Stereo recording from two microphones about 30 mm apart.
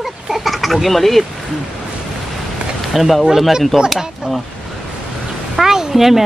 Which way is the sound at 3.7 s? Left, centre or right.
Centre.